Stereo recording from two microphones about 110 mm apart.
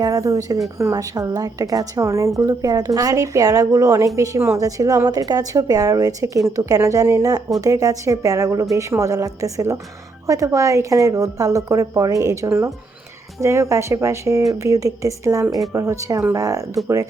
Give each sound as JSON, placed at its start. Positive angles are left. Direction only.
{"t": 0.0, "sound": "a woman's voice", "side_deg": -30}